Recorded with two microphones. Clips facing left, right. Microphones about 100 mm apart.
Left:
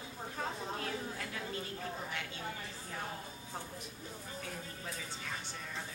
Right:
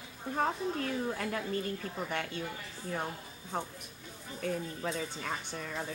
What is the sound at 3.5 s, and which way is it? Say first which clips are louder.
Speech: right 9 dB; 60° right (ahead or behind).